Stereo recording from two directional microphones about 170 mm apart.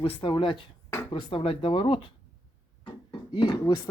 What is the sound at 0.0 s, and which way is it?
Speech, 30° left (ahead or behind).